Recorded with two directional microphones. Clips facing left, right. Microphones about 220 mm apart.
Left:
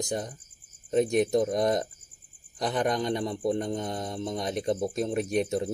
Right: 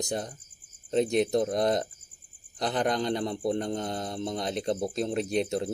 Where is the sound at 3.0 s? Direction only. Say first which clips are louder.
Even; 15° left (ahead or behind).